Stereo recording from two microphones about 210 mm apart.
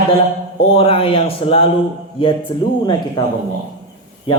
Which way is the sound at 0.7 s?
25° left (ahead or behind).